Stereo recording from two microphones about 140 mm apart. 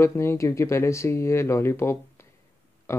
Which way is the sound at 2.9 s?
20° left (ahead or behind).